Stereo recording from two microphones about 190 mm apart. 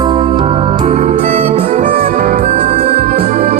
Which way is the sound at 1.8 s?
45° right (ahead or behind).